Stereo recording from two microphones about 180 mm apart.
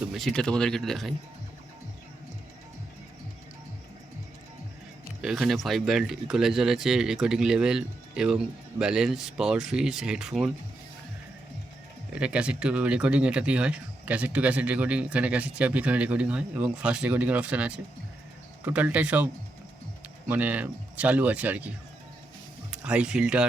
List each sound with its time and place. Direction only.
0.1 s speech: centre (ahead or behind)
5.2 s speech: centre (ahead or behind)
12.2 s speech: 5° right (ahead or behind)
22.7 s speech: 5° right (ahead or behind)